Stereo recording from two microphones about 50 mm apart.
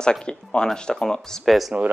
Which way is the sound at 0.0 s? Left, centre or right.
Centre.